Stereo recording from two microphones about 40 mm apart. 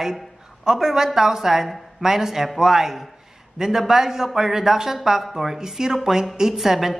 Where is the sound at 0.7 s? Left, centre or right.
Centre.